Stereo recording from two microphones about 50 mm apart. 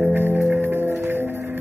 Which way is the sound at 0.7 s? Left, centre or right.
Right.